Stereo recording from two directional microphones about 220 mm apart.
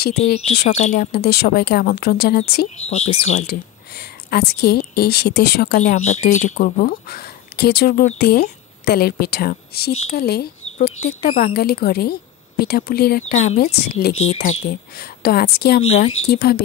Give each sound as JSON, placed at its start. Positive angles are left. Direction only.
{"t": 0.5, "sound": "speech", "side_deg": 30}
{"t": 1.1, "sound": "speech", "side_deg": 45}
{"t": 2.8, "sound": "speech", "side_deg": 30}
{"t": 3.4, "sound": "speech", "side_deg": 45}
{"t": 5.8, "sound": "speech", "side_deg": 35}
{"t": 13.3, "sound": "speech", "side_deg": 35}
{"t": 13.7, "sound": "speech", "side_deg": 45}
{"t": 14.2, "sound": "speech", "side_deg": 30}
{"t": 14.7, "sound": "speech", "side_deg": 45}